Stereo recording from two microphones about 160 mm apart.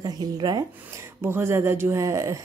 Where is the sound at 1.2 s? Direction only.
15° right (ahead or behind).